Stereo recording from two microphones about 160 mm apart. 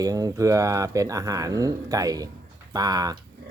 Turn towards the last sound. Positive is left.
turn(degrees=-25)  # may be behind; listen again after turning